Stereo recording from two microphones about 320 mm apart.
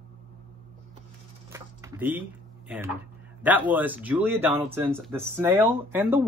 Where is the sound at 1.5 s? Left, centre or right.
Centre.